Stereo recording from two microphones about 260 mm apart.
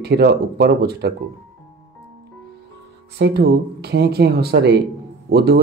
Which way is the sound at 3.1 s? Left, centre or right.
Right.